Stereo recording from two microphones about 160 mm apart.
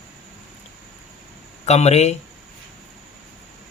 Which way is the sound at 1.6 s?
40° left (ahead or behind).